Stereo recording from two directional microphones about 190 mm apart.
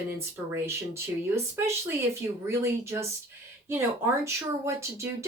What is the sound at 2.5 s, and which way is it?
Speech, 15° right (ahead or behind).